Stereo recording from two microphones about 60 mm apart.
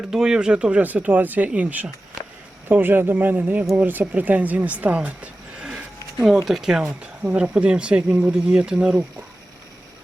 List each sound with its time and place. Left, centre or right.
0.1 s speech: centre
2.6 s speech: right
5.5 s a sound: centre
6.2 s speech: centre